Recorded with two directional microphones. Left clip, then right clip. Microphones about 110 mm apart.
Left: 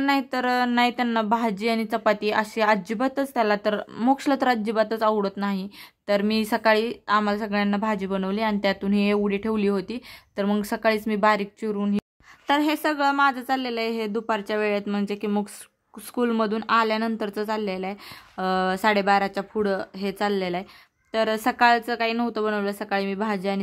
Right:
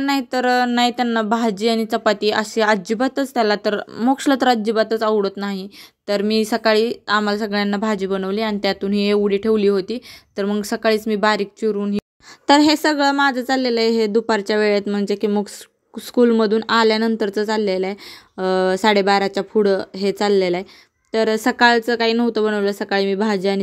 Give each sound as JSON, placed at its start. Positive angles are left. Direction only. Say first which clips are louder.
{"t": 0.0, "sound": "speech", "louder": "right 4 dB", "side_deg": -20}
{"t": 12.4, "sound": "a woman's voice", "louder": "right 8 dB", "side_deg": -55}